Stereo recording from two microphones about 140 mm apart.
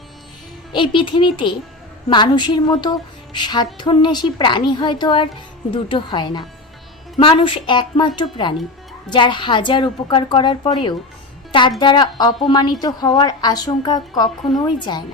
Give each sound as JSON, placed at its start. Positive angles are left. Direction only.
{"t": 0.7, "sound": "a woman's voice", "side_deg": 35}